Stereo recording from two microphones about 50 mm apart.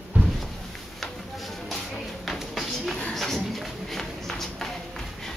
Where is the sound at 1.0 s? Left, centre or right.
Centre.